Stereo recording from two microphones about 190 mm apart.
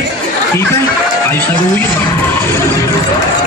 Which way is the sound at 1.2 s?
10° left (ahead or behind).